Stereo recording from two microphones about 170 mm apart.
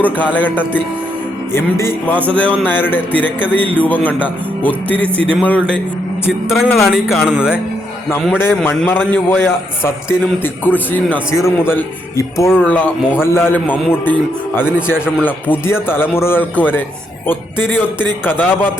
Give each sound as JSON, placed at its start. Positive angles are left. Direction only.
{"t": 0.3, "sound": "a man's voice", "side_deg": 10}
{"t": 2.0, "sound": "a man's voice", "side_deg": 10}
{"t": 6.9, "sound": "speech", "side_deg": 0}
{"t": 8.4, "sound": "a man's voice", "side_deg": 15}